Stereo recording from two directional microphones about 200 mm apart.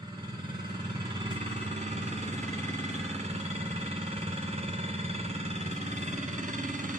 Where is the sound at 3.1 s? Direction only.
35° right (ahead or behind).